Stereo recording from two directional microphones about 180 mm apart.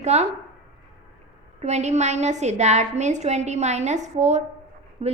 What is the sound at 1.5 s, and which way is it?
A woman's voice, 40° right (ahead or behind).